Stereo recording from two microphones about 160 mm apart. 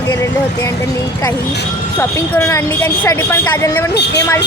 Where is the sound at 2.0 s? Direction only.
15° left (ahead or behind).